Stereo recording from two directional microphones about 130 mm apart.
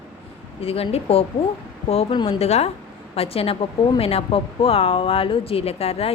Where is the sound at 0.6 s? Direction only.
50° left (ahead or behind).